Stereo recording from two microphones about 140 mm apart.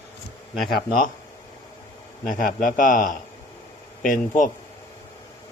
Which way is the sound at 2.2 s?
70° left (ahead or behind).